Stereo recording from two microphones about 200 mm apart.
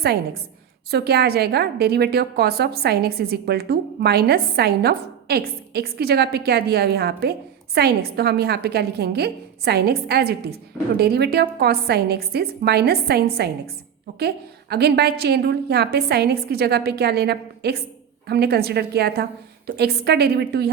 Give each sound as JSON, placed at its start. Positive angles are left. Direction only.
{"t": 0.9, "sound": "a woman's voice", "side_deg": -55}